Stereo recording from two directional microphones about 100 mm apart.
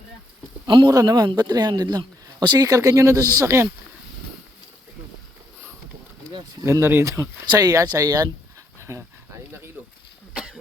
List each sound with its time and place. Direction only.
0.7 s speech: 45° right (ahead or behind)
6.7 s speech: 25° right (ahead or behind)
7.4 s speech: 45° right (ahead or behind)
8.8 s a sound: 30° right (ahead or behind)
10.3 s cough: 5° right (ahead or behind)